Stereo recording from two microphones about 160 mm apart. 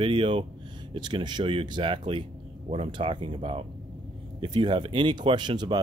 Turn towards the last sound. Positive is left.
turn(degrees=-30)  # may be behind; listen again after turning